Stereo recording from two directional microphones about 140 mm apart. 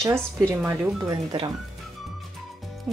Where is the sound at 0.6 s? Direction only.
15° right (ahead or behind).